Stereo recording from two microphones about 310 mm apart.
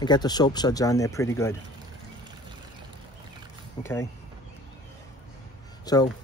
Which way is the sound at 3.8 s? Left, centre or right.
Centre.